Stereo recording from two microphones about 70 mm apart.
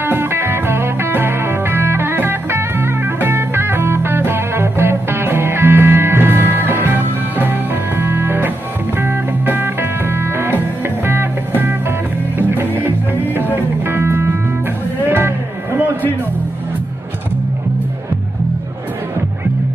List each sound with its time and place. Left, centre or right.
0.0 s music: right